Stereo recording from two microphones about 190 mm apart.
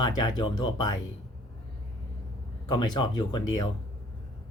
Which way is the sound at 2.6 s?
25° left (ahead or behind).